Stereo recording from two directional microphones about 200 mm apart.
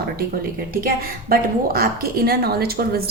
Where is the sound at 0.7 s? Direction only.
45° right (ahead or behind).